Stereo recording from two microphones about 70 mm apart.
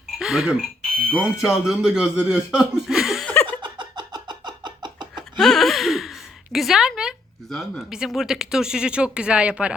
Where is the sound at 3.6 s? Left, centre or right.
Right.